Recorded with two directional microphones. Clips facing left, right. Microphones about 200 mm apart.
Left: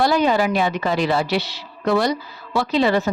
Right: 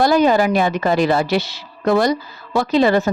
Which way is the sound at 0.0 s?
45° right (ahead or behind).